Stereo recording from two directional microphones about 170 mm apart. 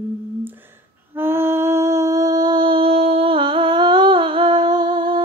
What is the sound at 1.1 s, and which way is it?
Music, 15° right (ahead or behind).